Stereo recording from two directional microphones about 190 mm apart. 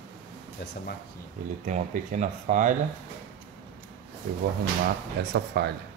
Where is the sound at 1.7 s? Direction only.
40° right (ahead or behind).